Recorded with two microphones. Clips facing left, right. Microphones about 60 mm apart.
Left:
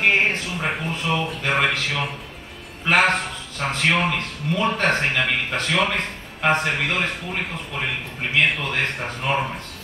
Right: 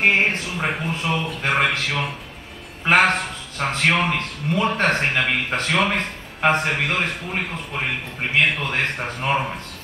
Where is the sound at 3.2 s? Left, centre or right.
Right.